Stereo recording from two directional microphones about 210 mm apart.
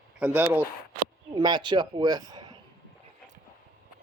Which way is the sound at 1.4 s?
20° right (ahead or behind).